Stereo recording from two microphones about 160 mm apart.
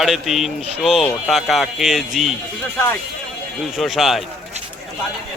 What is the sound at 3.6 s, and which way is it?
Speech, centre (ahead or behind).